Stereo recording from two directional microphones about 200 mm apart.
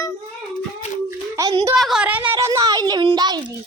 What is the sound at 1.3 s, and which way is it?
Speech, 15° right (ahead or behind).